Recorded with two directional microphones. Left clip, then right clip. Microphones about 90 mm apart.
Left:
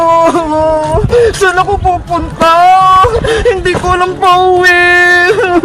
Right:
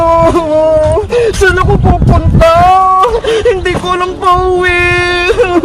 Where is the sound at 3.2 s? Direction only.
30° right (ahead or behind).